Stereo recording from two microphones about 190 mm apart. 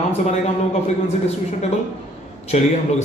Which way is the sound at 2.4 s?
35° left (ahead or behind).